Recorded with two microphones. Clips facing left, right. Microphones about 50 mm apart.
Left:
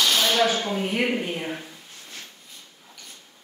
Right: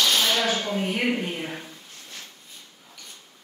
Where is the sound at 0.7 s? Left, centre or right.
Centre.